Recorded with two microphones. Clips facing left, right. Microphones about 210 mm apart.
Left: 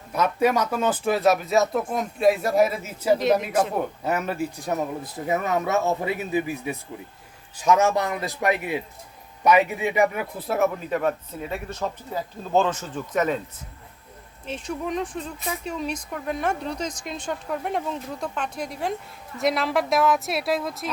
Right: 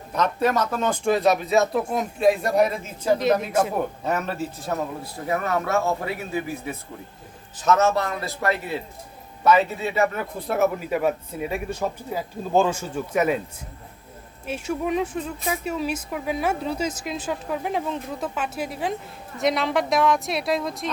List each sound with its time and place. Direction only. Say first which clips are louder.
0.1 s speech: left 1 dB; 10° left (ahead or behind); by 3.8 s 5° right (ahead or behind)
4.0 s a man's voice: even; 10° left (ahead or behind)
10.4 s speech: right 1 dB; centre (ahead or behind)
14.4 s speech: right 3 dB; 10° right (ahead or behind)